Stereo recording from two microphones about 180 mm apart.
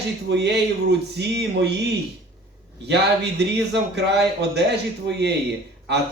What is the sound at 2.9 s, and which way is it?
Speech, 70° right (ahead or behind).